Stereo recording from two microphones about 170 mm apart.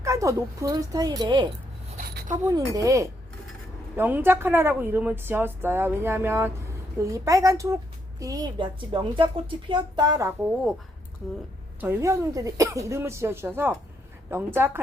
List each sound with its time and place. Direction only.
0.0 s a woman's voice: 20° right (ahead or behind)
11.8 s a woman's voice: 15° right (ahead or behind)